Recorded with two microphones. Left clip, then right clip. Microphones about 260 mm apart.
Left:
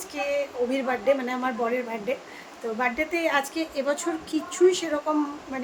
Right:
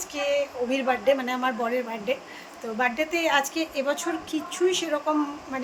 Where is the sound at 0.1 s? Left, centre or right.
Centre.